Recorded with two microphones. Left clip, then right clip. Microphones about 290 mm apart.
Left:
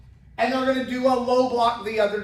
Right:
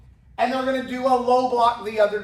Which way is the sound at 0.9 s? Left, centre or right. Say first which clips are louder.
Right 4 dB; centre.